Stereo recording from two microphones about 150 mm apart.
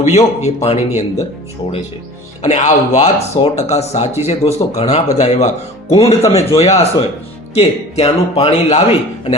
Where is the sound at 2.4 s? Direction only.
50° left (ahead or behind).